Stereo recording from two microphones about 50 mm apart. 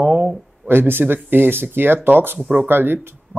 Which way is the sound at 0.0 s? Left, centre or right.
Right.